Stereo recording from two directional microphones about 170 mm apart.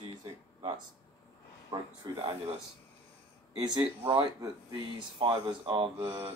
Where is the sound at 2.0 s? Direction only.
25° right (ahead or behind).